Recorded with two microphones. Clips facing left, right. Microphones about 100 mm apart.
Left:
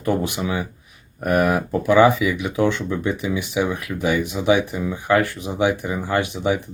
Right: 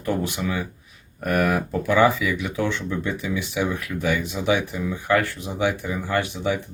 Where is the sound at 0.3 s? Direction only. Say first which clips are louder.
Left 2 dB; 20° left (ahead or behind).